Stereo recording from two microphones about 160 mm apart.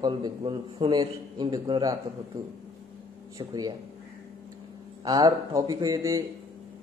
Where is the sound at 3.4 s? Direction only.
25° right (ahead or behind).